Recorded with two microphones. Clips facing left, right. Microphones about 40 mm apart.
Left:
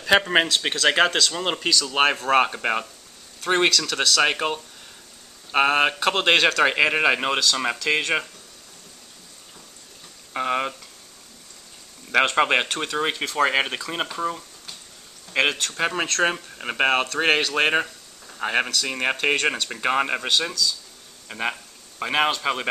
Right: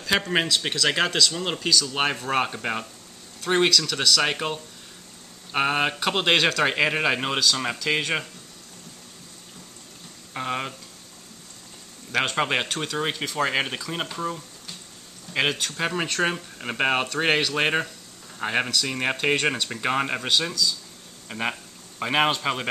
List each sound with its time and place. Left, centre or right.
0.0 s a man's voice: left
10.3 s a man's voice: centre
12.4 s a man's voice: centre